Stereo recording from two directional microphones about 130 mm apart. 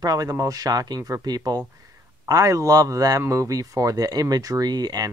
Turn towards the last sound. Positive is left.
turn(degrees=-30)  # may be behind; listen again after turning